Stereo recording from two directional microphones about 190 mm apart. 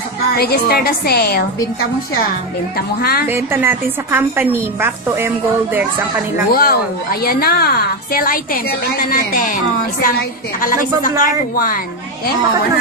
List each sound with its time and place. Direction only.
0.4 s a woman's voice: 55° left (ahead or behind)
3.0 s a woman's voice: 55° left (ahead or behind)
3.3 s a woman's voice: 10° right (ahead or behind)
6.5 s a woman's voice: 50° left (ahead or behind)